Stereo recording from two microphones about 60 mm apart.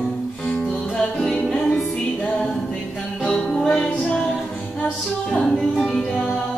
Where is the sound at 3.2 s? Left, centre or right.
Centre.